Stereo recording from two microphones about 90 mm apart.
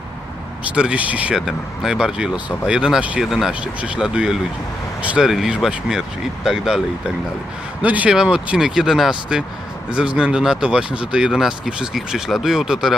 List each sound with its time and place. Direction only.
0.6 s speech: 15° right (ahead or behind)
1.4 s speech: 5° right (ahead or behind)
3.2 s speech: 5° right (ahead or behind)
3.6 s speech: 15° right (ahead or behind)
7.8 s speech: 15° right (ahead or behind)